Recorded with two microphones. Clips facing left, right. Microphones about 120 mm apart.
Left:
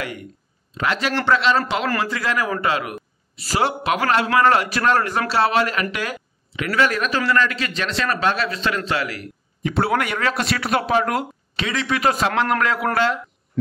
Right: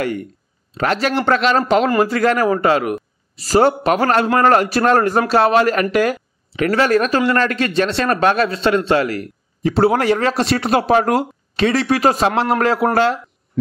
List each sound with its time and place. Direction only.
0.0 s speech: 45° right (ahead or behind)